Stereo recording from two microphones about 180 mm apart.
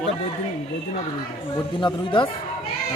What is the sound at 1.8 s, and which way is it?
Speech, 25° left (ahead or behind).